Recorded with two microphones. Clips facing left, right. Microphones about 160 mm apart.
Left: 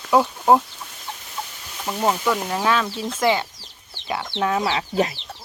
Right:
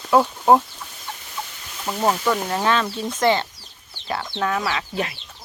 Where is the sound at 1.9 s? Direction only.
Centre (ahead or behind).